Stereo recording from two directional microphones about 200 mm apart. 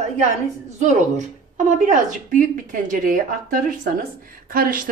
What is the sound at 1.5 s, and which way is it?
A woman's voice, 40° right (ahead or behind).